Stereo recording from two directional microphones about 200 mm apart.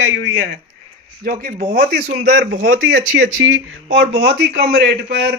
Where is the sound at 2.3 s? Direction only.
60° right (ahead or behind).